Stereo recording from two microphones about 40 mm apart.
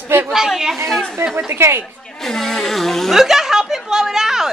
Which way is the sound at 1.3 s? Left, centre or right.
Right.